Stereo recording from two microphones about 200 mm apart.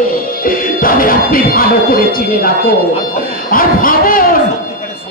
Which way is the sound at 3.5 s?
45° left (ahead or behind).